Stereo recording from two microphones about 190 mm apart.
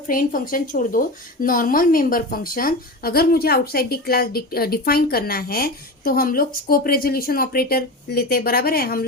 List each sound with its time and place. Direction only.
0.1 s speech: 45° left (ahead or behind)